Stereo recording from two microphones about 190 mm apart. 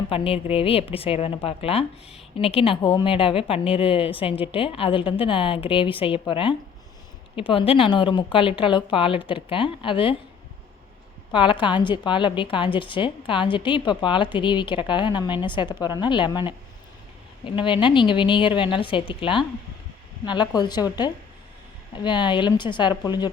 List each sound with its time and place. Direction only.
0.1 s a woman's voice: 30° left (ahead or behind)
11.3 s a woman's voice: 25° left (ahead or behind)